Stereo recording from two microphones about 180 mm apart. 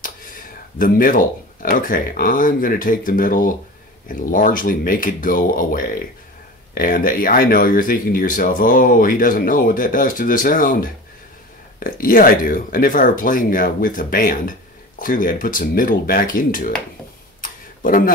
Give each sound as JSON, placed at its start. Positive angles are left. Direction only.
{"t": 0.7, "sound": "speech", "side_deg": 50}
{"t": 17.4, "sound": "tick-tock", "side_deg": 50}